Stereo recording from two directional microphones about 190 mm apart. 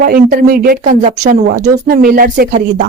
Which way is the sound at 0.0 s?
45° right (ahead or behind).